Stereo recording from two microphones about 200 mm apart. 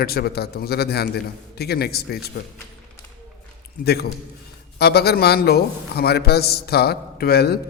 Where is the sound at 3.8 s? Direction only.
50° left (ahead or behind).